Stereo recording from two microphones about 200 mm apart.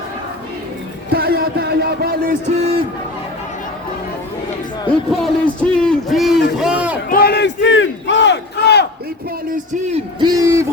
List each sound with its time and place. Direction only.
1.1 s a sound: 50° right (ahead or behind)
4.9 s a man's voice: 5° left (ahead or behind)
7.1 s battle cry: 50° left (ahead or behind)
9.5 s a man's voice: 35° right (ahead or behind)
10.2 s speech: 20° right (ahead or behind)